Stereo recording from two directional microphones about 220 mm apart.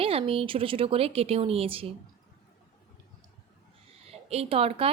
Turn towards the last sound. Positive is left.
turn(degrees=-25)  # may be behind; listen again after turning